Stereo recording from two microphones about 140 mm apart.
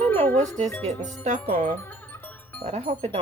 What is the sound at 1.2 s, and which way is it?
Speech, 60° right (ahead or behind).